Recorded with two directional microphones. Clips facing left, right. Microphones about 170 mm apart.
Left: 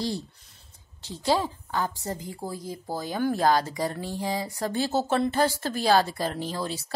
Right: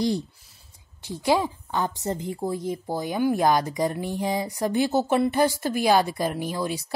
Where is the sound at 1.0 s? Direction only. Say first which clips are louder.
Right 3 dB; 15° right (ahead or behind).